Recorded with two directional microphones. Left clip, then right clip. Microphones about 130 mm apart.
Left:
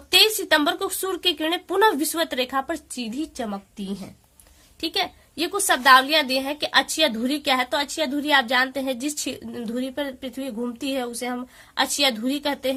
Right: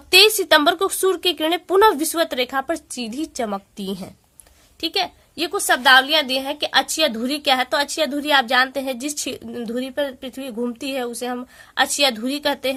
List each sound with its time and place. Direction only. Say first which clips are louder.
0.1 s speech: right 5 dB; 45° right (ahead or behind)
3.3 s a woman's voice: right 6 dB; 70° right (ahead or behind)
4.8 s a woman's voice: right 3 dB; 35° right (ahead or behind)